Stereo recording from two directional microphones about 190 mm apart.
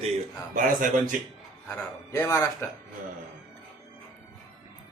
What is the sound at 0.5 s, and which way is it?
Speech, 45° right (ahead or behind).